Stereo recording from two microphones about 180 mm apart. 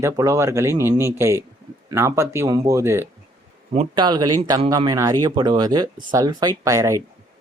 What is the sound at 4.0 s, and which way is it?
Speech, 25° right (ahead or behind).